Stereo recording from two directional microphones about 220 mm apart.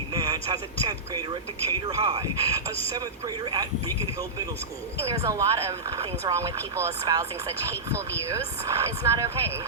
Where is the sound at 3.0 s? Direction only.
15° right (ahead or behind).